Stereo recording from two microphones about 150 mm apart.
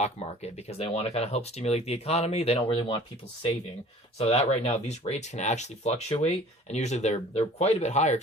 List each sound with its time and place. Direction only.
0.0 s speech: 45° left (ahead or behind)
4.2 s speech: 45° left (ahead or behind)